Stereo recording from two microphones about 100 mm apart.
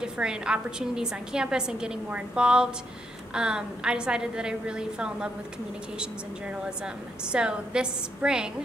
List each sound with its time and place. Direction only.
0.0 s a woman's voice: 10° right (ahead or behind)
7.3 s a woman's voice: 10° right (ahead or behind)